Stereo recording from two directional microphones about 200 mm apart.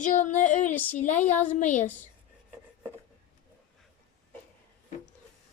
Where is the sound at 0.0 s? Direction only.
40° left (ahead or behind).